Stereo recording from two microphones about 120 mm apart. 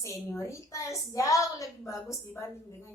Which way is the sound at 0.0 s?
25° left (ahead or behind).